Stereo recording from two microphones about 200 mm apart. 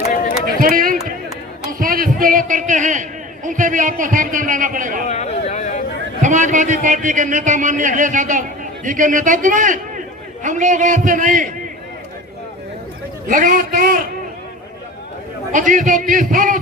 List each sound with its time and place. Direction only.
0.4 s run: 45° right (ahead or behind)
1.8 s a man's voice: 45° right (ahead or behind)
5.0 s a sound: 35° left (ahead or behind)
6.2 s a man's voice: 40° right (ahead or behind)
13.2 s a man's voice: 40° right (ahead or behind)
15.5 s a man's voice: 40° right (ahead or behind)